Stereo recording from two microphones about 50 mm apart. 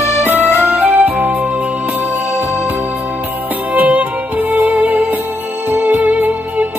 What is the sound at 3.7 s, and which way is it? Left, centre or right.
Music, right.